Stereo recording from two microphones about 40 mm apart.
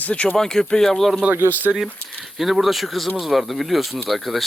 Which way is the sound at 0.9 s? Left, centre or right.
Centre.